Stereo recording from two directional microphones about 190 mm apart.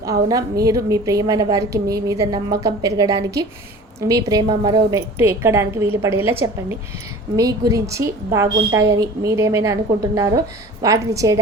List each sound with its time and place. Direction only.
0.3 s a woman's voice: 20° right (ahead or behind)
7.3 s a woman's voice: 20° right (ahead or behind)